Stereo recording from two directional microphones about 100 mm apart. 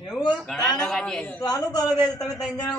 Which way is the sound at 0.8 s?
5° left (ahead or behind).